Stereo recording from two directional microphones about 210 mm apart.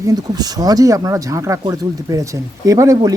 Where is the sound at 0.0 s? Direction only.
20° right (ahead or behind).